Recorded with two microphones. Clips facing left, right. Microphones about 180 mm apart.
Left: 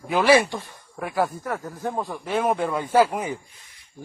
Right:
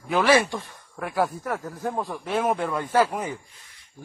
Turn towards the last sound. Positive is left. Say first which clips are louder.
# left 3 dB
turn(degrees=10)  # may be behind; listen again after turning